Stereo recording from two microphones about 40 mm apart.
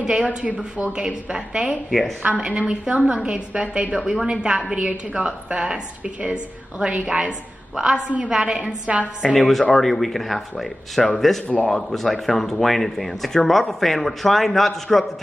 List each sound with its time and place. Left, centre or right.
0.0 s a woman's voice: right
1.9 s speech: centre
2.2 s a woman's voice: right
7.9 s a woman's voice: right
8.3 s a woman's voice: right
9.2 s speech: centre